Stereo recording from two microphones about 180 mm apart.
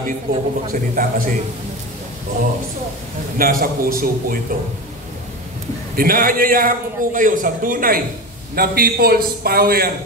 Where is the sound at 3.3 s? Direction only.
55° right (ahead or behind).